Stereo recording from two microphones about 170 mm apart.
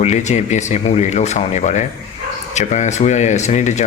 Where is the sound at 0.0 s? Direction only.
40° left (ahead or behind).